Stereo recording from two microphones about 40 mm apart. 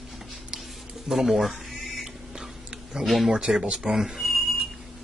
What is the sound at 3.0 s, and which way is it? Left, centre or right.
Speech, centre.